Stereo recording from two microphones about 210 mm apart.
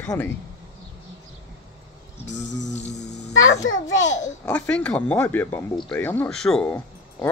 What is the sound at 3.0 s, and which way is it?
A child's voice, 65° left (ahead or behind).